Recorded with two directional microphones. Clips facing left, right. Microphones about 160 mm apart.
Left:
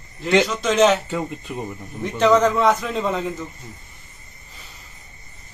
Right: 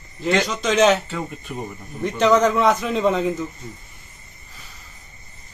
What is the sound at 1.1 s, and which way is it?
Speech, 15° left (ahead or behind).